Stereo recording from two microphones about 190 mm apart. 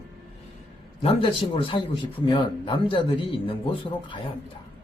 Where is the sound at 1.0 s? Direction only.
30° left (ahead or behind).